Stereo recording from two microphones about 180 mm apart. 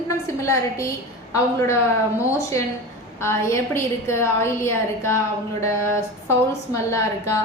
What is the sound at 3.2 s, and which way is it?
A woman's voice, 15° left (ahead or behind).